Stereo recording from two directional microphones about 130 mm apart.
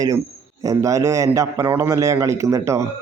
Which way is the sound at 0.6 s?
25° right (ahead or behind).